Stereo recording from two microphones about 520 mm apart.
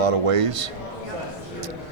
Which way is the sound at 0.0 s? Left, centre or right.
Right.